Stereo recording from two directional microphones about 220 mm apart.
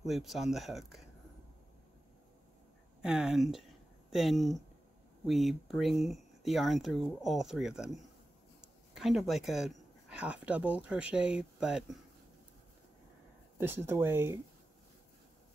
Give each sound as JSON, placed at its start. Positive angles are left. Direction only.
{"t": 0.0, "sound": "speech", "side_deg": 0}
{"t": 3.0, "sound": "speech", "side_deg": -5}
{"t": 13.6, "sound": "speech", "side_deg": -10}